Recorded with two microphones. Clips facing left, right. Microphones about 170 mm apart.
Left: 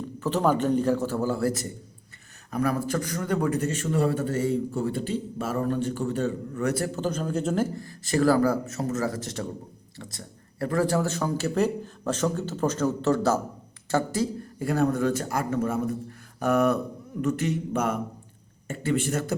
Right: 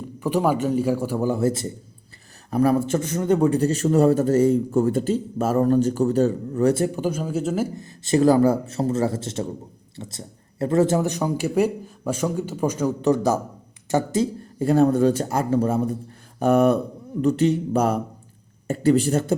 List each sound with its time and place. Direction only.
0.2 s a man's voice: 10° right (ahead or behind); by 6.8 s 30° right (ahead or behind)
6.8 s speech: 10° right (ahead or behind)
7.8 s a man's voice: 25° right (ahead or behind)